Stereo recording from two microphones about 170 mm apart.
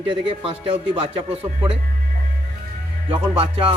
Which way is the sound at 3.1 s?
35° right (ahead or behind).